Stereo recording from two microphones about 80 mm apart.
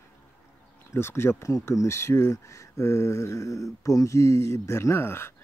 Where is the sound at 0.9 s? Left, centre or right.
Left.